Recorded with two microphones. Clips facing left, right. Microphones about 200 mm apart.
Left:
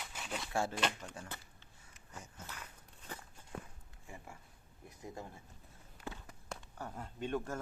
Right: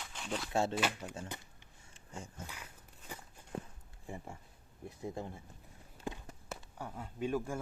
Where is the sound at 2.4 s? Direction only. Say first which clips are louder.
Right 1 dB; 10° right (ahead or behind).